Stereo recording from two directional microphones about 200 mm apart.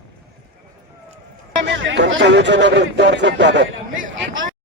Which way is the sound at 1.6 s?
65° right (ahead or behind).